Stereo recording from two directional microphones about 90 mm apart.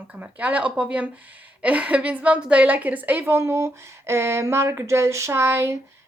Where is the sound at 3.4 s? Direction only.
30° right (ahead or behind).